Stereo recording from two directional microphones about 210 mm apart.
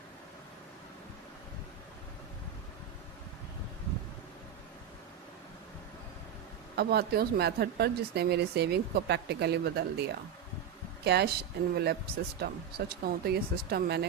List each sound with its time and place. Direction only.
6.7 s speech: 50° right (ahead or behind)